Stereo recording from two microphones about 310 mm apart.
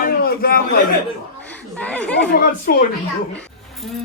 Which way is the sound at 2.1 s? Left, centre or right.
Left.